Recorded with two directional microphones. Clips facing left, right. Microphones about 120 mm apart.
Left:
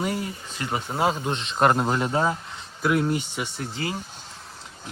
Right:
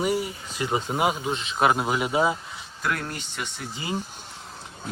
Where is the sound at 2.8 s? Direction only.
5° left (ahead or behind).